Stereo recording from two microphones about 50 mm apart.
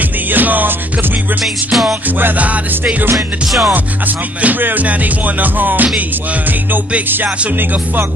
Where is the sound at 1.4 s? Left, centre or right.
Centre.